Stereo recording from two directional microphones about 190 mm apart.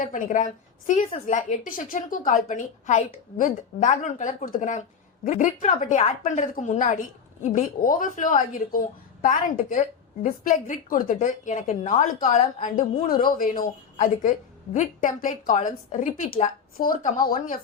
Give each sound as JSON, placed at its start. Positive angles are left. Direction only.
{"t": 0.0, "sound": "a woman's voice", "side_deg": 40}